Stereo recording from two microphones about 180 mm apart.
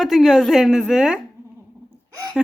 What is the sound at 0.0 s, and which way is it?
Speech, centre (ahead or behind).